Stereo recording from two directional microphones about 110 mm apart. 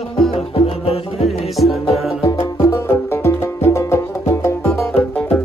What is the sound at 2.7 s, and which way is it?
Music, 25° left (ahead or behind).